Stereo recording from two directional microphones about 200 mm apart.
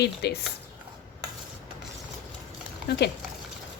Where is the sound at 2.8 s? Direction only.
50° left (ahead or behind).